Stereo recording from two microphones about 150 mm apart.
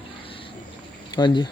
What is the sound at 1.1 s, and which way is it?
Speech, 30° left (ahead or behind).